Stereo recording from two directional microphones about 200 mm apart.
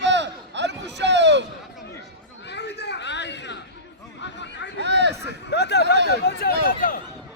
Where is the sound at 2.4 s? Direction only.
60° left (ahead or behind).